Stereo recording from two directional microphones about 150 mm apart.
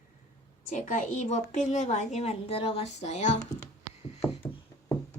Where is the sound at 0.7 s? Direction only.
55° left (ahead or behind).